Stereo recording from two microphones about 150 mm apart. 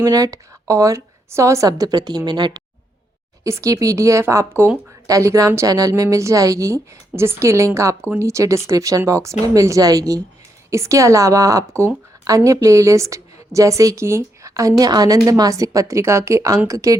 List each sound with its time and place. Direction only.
0.0 s a woman's voice: 25° right (ahead or behind)